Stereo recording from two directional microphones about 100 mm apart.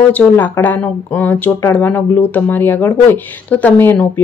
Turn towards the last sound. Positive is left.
turn(degrees=15)  # may be behind; listen again after turning